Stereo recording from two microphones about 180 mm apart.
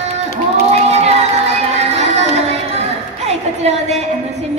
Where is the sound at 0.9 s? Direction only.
35° right (ahead or behind).